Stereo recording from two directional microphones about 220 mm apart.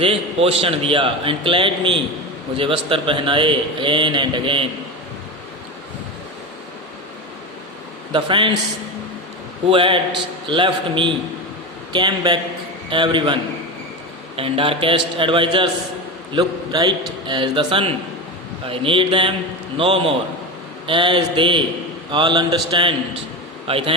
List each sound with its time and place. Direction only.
0.0 s a man's voice: 25° right (ahead or behind)
8.1 s a man's voice: 25° right (ahead or behind)
9.6 s a man's voice: 25° right (ahead or behind)